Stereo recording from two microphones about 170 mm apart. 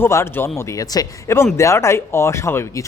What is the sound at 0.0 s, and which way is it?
Speech, 15° left (ahead or behind).